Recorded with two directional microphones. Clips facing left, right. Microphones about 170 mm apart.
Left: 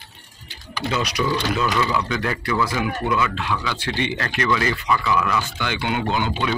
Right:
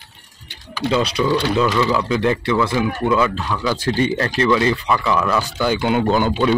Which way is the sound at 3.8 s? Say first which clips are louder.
Right 6 dB; 40° right (ahead or behind).